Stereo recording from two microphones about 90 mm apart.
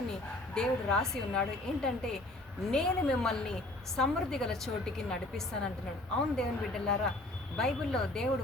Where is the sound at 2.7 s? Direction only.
5° left (ahead or behind).